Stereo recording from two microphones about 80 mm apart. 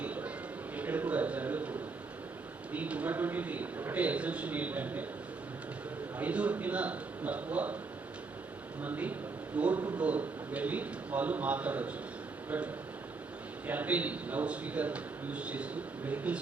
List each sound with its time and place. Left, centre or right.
0.0 s music: centre
0.8 s a sound: centre
2.7 s a man's voice: centre
6.1 s a man's voice: centre
8.8 s a man's voice: centre